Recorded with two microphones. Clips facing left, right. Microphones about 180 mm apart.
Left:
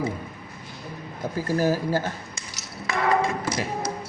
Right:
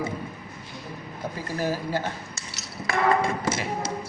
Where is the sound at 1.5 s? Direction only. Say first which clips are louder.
Left 5 dB; 45° left (ahead or behind).